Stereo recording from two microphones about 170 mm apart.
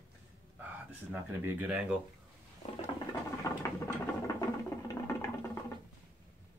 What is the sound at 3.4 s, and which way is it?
Music, 15° left (ahead or behind).